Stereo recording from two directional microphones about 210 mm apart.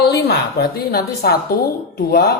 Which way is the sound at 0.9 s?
45° left (ahead or behind).